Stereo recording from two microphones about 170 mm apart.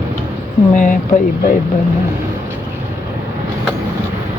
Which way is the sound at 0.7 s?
50° left (ahead or behind).